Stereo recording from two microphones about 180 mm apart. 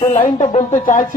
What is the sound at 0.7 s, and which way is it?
Speech, 45° left (ahead or behind).